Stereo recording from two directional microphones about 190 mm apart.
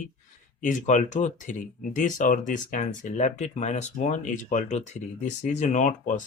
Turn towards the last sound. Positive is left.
turn(degrees=40)  # may be behind; listen again after turning